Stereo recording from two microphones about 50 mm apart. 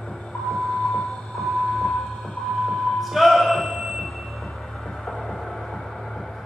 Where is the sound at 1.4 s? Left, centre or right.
Centre.